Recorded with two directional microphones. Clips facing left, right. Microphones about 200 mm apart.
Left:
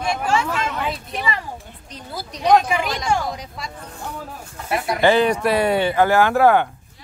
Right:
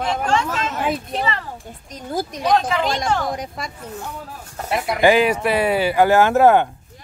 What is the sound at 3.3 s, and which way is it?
Speech, 50° right (ahead or behind).